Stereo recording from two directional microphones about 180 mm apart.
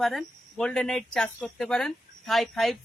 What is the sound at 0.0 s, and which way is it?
Speech, 5° left (ahead or behind).